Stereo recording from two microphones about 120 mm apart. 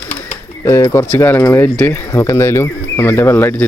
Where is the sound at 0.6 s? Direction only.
25° left (ahead or behind).